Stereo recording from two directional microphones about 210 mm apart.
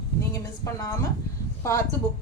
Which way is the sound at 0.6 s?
15° left (ahead or behind).